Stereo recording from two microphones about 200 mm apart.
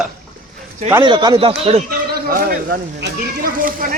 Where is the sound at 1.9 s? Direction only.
45° right (ahead or behind).